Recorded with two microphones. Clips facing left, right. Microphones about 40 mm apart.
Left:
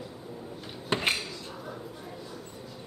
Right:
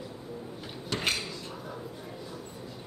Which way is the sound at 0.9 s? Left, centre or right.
Left.